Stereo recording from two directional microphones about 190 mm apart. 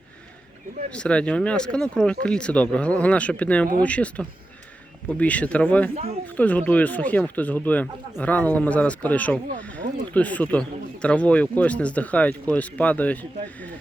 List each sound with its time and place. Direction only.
0.9 s speech: 5° left (ahead or behind)
5.9 s speech: 30° right (ahead or behind)
6.3 s speech: 10° left (ahead or behind)